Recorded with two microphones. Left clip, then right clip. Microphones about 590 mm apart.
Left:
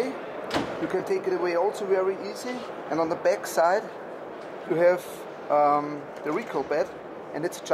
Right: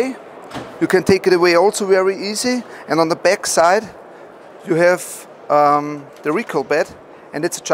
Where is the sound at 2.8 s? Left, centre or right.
Right.